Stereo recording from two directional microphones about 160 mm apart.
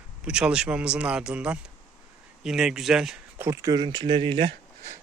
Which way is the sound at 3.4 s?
20° right (ahead or behind).